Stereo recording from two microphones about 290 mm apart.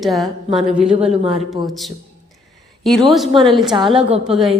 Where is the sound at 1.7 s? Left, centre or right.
Centre.